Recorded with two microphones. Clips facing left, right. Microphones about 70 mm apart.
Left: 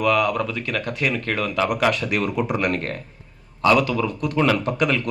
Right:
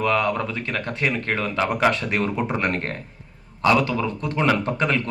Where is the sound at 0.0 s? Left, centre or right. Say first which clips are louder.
Left 2 dB; right.